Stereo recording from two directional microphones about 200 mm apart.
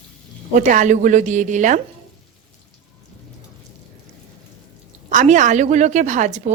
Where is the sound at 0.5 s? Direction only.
40° right (ahead or behind).